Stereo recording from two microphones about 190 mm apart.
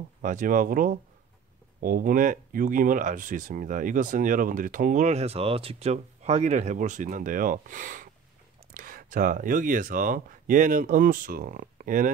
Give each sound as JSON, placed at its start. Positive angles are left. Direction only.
{"t": 0.2, "sound": "speech", "side_deg": -45}